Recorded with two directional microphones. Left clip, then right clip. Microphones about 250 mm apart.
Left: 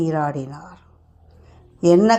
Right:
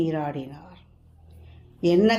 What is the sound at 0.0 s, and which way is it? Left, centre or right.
Speech, centre.